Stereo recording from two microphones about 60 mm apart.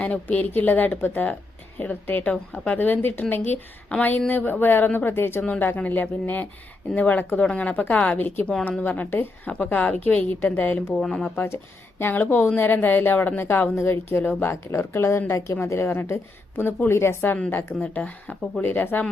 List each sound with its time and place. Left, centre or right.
0.0 s a woman's voice: left
2.3 s a woman's voice: centre
2.7 s speech: left
3.9 s a woman's voice: left
5.5 s a woman's voice: left
10.9 s speech: centre
11.3 s speech: left
14.5 s a woman's voice: left
17.5 s a woman's voice: left